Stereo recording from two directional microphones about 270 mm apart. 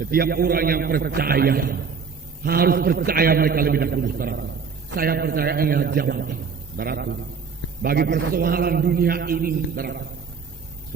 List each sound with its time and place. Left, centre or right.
0.0 s a man's voice: right